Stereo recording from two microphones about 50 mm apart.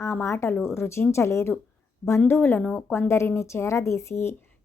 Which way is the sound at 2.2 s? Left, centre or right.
Left.